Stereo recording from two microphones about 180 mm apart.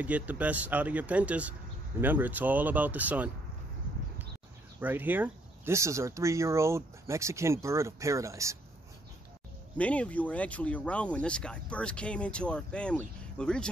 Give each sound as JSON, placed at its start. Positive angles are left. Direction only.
{"t": 0.0, "sound": "speech", "side_deg": -10}
{"t": 4.7, "sound": "speech", "side_deg": -10}
{"t": 9.8, "sound": "speech", "side_deg": 5}